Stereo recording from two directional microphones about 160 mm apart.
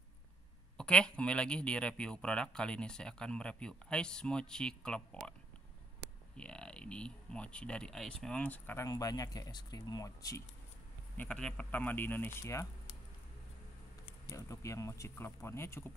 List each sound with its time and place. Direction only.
0.7 s speech: 5° left (ahead or behind)
6.3 s speech: 5° left (ahead or behind)
11.1 s speech: 5° left (ahead or behind)
14.3 s speech: 20° left (ahead or behind)